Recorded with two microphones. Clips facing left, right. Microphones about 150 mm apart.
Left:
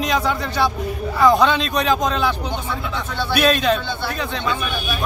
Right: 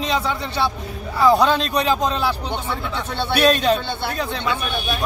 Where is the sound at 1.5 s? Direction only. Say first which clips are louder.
Even; 35° right (ahead or behind).